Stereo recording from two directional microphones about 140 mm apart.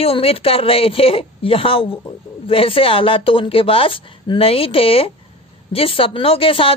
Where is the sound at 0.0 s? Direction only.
45° left (ahead or behind).